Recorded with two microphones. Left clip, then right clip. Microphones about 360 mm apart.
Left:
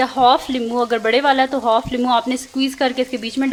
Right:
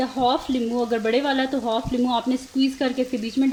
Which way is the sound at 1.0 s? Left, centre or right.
Centre.